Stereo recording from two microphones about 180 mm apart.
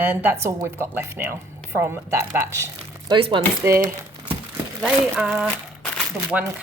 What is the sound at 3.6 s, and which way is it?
Speech, 15° right (ahead or behind).